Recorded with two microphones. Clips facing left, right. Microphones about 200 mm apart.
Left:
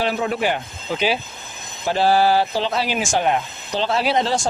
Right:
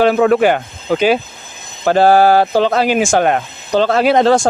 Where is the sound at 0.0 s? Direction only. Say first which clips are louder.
Right 11 dB; 55° right (ahead or behind).